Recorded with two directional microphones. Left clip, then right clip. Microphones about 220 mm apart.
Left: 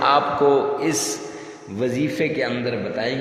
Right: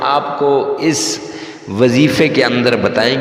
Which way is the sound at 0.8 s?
30° right (ahead or behind).